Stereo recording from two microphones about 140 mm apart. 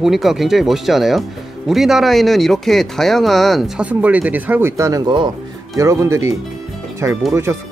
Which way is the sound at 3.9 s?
10° right (ahead or behind).